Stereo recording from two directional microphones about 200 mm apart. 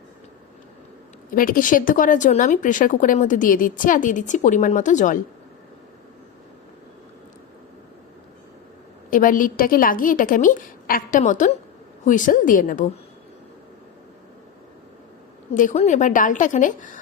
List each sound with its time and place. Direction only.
1.4 s speech: 45° left (ahead or behind)
9.0 s a woman's voice: 40° left (ahead or behind)
15.5 s speech: 35° left (ahead or behind)